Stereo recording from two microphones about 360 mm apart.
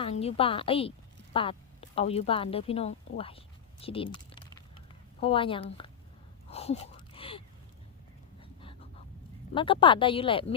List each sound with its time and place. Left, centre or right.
0.0 s a woman's voice: centre
6.5 s a sound: centre
9.6 s speech: centre